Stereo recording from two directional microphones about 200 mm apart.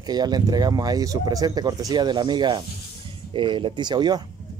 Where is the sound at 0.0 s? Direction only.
20° right (ahead or behind).